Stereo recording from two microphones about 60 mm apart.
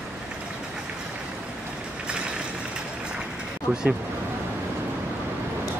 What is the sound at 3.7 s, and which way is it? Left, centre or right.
Speech, centre.